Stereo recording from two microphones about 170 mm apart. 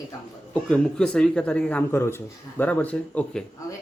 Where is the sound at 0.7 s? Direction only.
5° left (ahead or behind).